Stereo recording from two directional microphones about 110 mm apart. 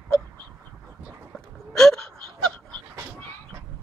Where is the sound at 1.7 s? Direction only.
5° left (ahead or behind).